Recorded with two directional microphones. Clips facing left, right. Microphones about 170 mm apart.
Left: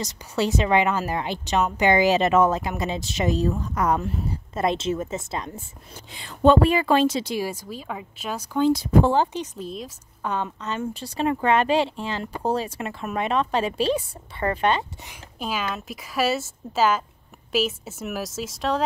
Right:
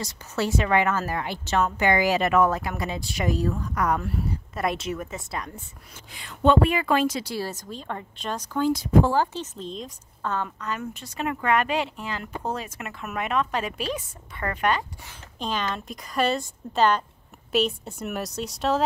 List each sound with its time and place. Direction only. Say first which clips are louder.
0.0 s a woman's voice: left 3 dB; 20° left (ahead or behind)
8.5 s a woman's voice: left 2 dB; 25° left (ahead or behind); by 9.9 s 5° left (ahead or behind)
10.2 s a woman's voice: left 1 dB; 20° left (ahead or behind)
15.3 s speech: even; 10° left (ahead or behind)